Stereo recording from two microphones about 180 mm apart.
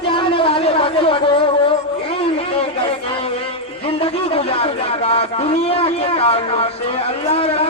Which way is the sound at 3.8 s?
30° left (ahead or behind).